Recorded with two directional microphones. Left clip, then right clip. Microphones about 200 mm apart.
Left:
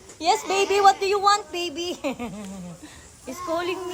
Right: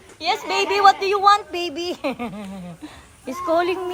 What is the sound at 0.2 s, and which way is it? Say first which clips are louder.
Speech: even; 20° left (ahead or behind).